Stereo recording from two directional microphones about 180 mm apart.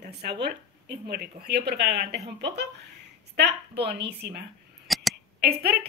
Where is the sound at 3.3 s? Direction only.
65° right (ahead or behind).